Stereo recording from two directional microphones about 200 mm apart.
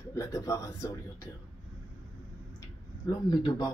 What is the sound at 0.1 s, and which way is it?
Speech, 15° left (ahead or behind).